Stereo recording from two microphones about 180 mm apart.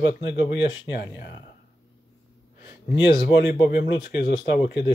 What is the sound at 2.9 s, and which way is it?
Speech, 70° left (ahead or behind).